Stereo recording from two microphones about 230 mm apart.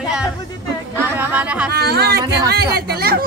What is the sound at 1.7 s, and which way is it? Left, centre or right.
A woman's voice, right.